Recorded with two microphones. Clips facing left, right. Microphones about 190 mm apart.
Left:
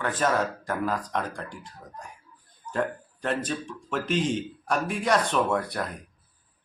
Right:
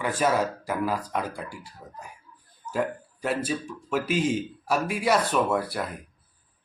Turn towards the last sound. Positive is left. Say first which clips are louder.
# right 1 dB
turn(degrees=-5)  # may be behind; listen again after turning